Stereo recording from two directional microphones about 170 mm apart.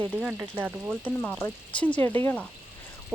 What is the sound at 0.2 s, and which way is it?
Speech, 10° right (ahead or behind).